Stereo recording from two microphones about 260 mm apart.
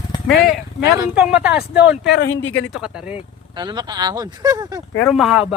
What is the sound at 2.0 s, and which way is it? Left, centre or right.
Speech, left.